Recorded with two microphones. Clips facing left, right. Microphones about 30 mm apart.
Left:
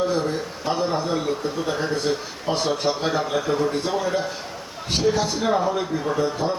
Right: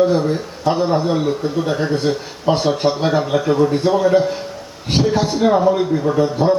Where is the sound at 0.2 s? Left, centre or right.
Centre.